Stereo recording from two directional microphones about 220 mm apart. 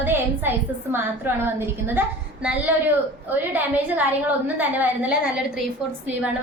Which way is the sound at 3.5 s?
10° right (ahead or behind).